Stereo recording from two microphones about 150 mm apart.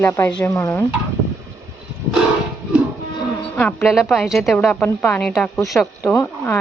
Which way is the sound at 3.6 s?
5° left (ahead or behind).